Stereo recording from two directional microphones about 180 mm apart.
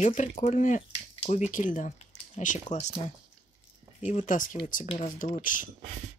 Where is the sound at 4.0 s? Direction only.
40° left (ahead or behind).